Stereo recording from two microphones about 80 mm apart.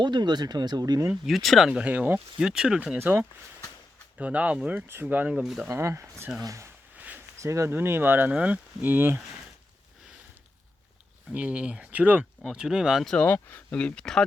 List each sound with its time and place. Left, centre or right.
0.0 s speech: right
1.1 s speech: centre
1.8 s speech: centre
3.0 s speech: right
5.4 s speech: centre
5.6 s speech: right
6.9 s a sound: centre
7.4 s speech: right
11.3 s speech: centre
12.5 s speech: centre
13.2 s speech: left; by 14.3 s centre